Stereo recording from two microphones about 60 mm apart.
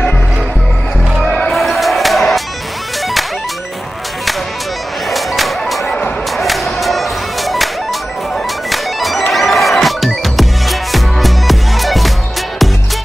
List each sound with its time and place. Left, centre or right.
1.5 s music: centre
5.1 s music: centre
5.9 s music: left
6.3 s music: centre